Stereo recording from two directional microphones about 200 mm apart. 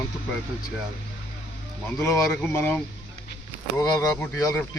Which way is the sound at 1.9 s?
10° left (ahead or behind).